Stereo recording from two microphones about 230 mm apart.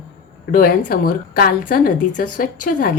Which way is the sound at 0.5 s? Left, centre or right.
Left.